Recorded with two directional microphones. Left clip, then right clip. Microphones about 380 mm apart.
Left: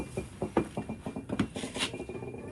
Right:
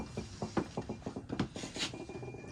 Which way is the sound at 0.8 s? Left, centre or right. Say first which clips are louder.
Left 3 dB; left.